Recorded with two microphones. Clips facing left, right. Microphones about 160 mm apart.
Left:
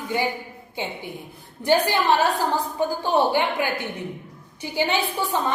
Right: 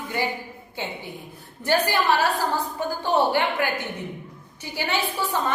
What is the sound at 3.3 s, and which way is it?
A woman's voice, 15° left (ahead or behind).